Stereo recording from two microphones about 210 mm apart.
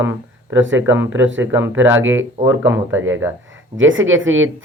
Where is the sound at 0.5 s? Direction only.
65° right (ahead or behind).